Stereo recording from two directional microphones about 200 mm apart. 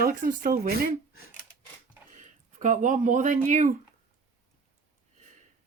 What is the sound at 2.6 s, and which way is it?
Speech, 40° right (ahead or behind).